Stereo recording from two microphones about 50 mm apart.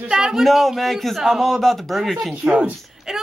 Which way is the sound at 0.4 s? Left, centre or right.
Centre.